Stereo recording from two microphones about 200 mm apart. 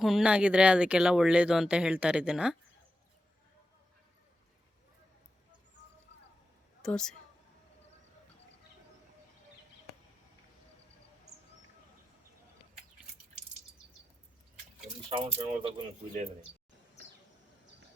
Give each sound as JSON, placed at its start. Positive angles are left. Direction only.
{"t": 0.0, "sound": "speech", "side_deg": 0}
{"t": 6.8, "sound": "speech", "side_deg": 5}
{"t": 15.1, "sound": "speech", "side_deg": -25}